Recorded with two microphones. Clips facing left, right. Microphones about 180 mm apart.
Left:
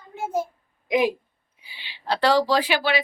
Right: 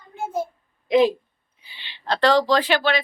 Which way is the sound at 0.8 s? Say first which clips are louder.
Right 4 dB; 10° left (ahead or behind).